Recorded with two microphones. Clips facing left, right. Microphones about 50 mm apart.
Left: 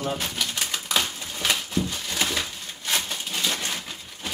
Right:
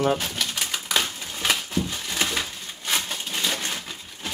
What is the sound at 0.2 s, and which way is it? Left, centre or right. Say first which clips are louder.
Bird: even; centre.